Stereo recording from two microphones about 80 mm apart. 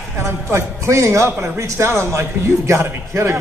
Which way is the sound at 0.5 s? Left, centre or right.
Right.